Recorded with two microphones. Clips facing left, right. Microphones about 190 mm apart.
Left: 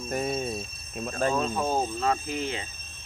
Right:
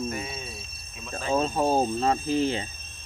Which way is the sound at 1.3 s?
35° right (ahead or behind).